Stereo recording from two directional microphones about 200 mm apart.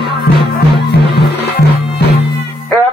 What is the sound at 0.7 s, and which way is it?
Music, 55° left (ahead or behind).